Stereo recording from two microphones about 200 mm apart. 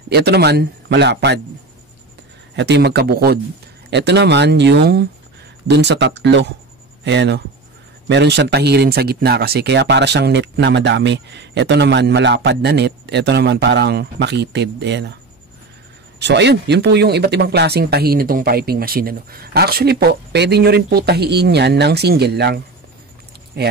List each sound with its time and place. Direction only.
0.1 s speech: 55° right (ahead or behind)
2.5 s speech: 60° right (ahead or behind)
16.2 s speech: 60° right (ahead or behind)